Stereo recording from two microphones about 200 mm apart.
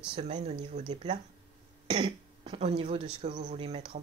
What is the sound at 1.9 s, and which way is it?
Speech, 25° right (ahead or behind).